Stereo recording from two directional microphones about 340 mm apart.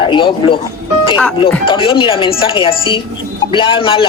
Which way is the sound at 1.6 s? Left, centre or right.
Centre.